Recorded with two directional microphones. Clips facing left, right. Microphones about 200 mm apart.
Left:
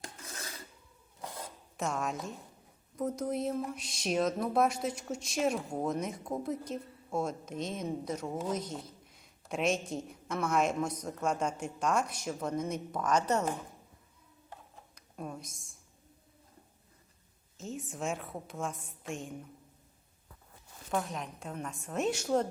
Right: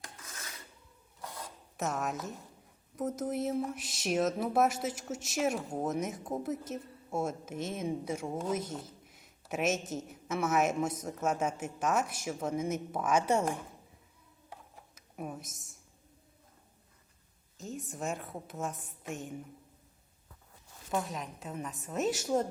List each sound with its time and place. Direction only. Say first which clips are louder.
0.0 s filing: left 4 dB; 30° left (ahead or behind)
1.7 s a woman's voice: even; centre (ahead or behind)
14.9 s whispering: right 1 dB; 10° right (ahead or behind)
15.4 s a woman's voice: even; 20° right (ahead or behind)
17.6 s a woman's voice: left 1 dB; centre (ahead or behind)
20.9 s a woman's voice: even; centre (ahead or behind)